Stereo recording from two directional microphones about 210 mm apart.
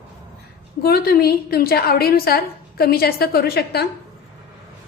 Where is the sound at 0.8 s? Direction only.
45° left (ahead or behind).